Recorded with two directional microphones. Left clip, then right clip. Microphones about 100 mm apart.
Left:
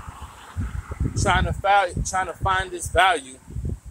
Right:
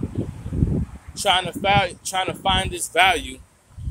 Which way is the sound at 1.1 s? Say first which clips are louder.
Right 2 dB; 25° right (ahead or behind).